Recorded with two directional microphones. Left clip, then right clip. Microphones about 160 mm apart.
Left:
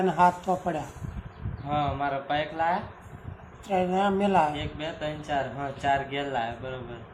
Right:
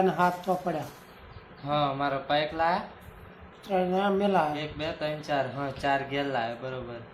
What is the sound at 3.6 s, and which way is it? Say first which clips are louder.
Speech: left 1 dB; 10° left (ahead or behind).